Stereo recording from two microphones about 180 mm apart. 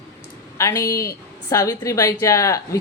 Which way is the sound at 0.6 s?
15° left (ahead or behind).